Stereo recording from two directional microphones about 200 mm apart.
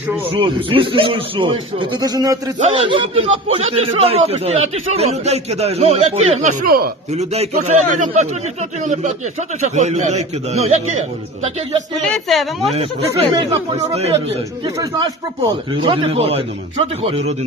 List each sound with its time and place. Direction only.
0.3 s a man's voice: 25° right (ahead or behind); by 6.9 s 50° right (ahead or behind)
7.1 s a man's voice: 35° right (ahead or behind)
12.0 s a woman's voice: centre (ahead or behind)
12.7 s a man's voice: 30° right (ahead or behind)
13.3 s speech: 20° right (ahead or behind)
13.7 s a man's voice: 30° right (ahead or behind)
15.7 s speech: 25° right (ahead or behind)